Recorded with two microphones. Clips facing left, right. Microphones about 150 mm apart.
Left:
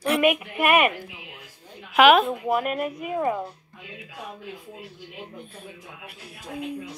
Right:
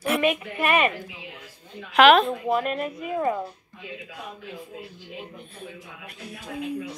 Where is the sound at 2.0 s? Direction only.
10° left (ahead or behind).